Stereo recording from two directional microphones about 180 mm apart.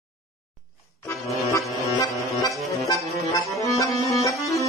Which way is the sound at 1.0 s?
15° left (ahead or behind).